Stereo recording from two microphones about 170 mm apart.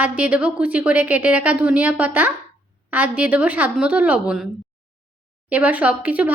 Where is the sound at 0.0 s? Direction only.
10° right (ahead or behind).